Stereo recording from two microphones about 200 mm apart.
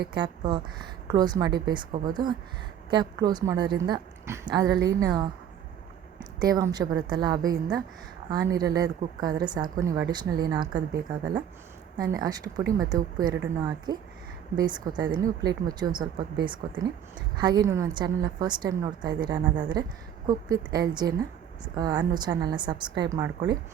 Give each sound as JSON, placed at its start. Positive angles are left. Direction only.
{"t": 0.0, "sound": "a woman's voice", "side_deg": -20}
{"t": 6.4, "sound": "a woman's voice", "side_deg": -20}
{"t": 17.7, "sound": "a woman's voice", "side_deg": -20}